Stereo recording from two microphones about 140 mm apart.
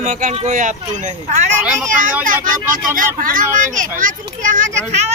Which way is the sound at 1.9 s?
70° right (ahead or behind).